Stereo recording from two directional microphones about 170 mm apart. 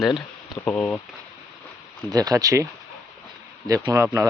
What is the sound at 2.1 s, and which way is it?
Speech, 20° right (ahead or behind).